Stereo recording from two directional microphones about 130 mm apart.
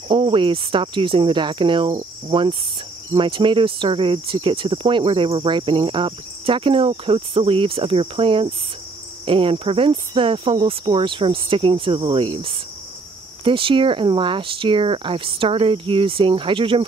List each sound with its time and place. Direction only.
0.1 s speech: 40° right (ahead or behind)
9.2 s cricket: 40° right (ahead or behind)
13.4 s speech: 40° right (ahead or behind)